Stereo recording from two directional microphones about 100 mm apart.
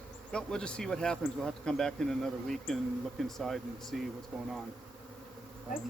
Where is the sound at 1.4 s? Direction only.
5° left (ahead or behind).